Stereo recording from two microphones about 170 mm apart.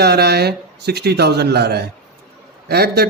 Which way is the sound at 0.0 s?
70° right (ahead or behind).